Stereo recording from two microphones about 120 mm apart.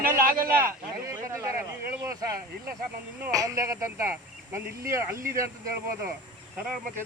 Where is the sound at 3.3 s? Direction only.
30° right (ahead or behind).